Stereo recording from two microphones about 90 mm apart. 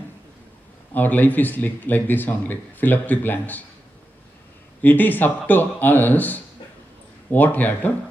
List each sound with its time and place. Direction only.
0.9 s speech: 20° left (ahead or behind)
4.8 s speech: 20° left (ahead or behind)